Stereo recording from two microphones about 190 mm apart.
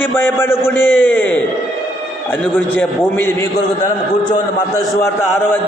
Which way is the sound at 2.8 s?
10° left (ahead or behind).